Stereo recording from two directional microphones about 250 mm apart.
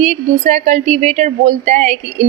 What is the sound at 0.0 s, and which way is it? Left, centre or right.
A woman's voice, right.